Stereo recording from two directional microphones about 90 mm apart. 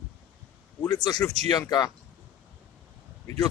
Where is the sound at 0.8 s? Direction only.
45° left (ahead or behind).